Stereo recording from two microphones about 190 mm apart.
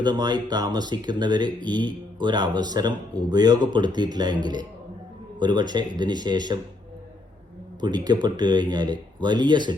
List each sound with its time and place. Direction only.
0.0 s speech: 20° right (ahead or behind)
7.8 s speech: 20° right (ahead or behind)